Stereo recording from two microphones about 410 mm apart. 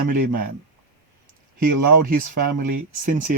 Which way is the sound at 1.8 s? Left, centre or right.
Right.